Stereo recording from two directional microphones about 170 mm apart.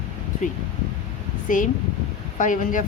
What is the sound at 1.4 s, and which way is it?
A woman's voice, 50° left (ahead or behind).